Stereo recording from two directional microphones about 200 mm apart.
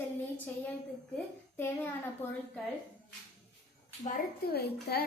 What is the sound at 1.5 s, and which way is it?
Speech, 10° left (ahead or behind).